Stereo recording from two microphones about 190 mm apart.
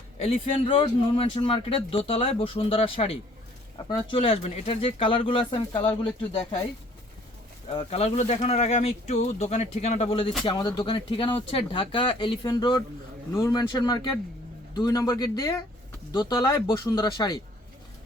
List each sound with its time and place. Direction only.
0.2 s speech: 30° left (ahead or behind)
7.7 s speech: 30° left (ahead or behind)